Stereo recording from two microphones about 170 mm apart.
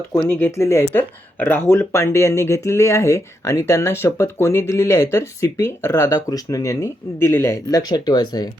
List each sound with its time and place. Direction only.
0.1 s speech: 10° left (ahead or behind)